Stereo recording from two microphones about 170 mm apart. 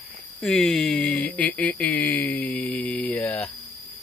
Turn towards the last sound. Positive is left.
turn(degrees=10)  # may be behind; listen again after turning